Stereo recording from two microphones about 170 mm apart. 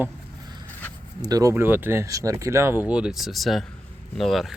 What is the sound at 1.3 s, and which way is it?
Speech, 20° right (ahead or behind).